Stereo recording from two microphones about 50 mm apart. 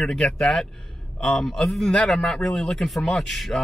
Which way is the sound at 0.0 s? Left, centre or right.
Centre.